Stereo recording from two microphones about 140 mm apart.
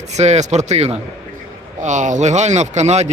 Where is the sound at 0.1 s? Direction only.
55° right (ahead or behind).